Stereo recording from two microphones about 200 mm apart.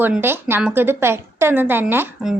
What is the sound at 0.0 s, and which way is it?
A woman's voice, 10° right (ahead or behind).